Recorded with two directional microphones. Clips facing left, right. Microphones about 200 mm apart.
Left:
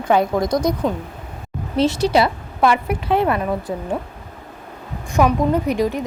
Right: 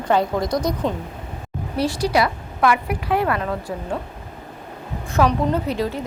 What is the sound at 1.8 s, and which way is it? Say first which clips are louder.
A woman's voice: left 4 dB; 25° left (ahead or behind).